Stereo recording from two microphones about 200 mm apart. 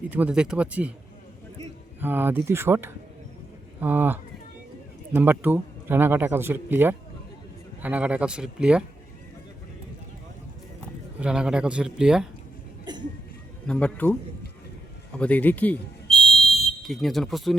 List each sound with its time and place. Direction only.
0.1 s speech: 5° right (ahead or behind)
2.0 s speech: 10° right (ahead or behind)
11.2 s speech: 5° right (ahead or behind)
12.9 s a sound: 20° right (ahead or behind)
13.7 s speech: 5° left (ahead or behind)
15.2 s a sound: 10° left (ahead or behind)